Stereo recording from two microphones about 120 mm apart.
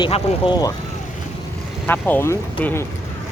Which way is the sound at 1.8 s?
15° left (ahead or behind).